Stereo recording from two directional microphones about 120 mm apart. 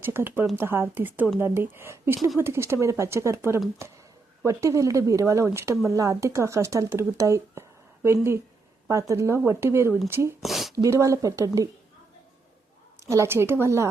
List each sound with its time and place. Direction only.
0.0 s speech: 20° right (ahead or behind)
10.4 s a sound: centre (ahead or behind)
10.8 s speech: 25° right (ahead or behind)
13.0 s speech: 25° right (ahead or behind)